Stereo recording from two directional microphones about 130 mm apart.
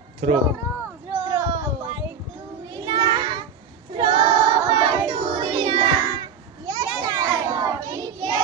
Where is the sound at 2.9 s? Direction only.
35° right (ahead or behind).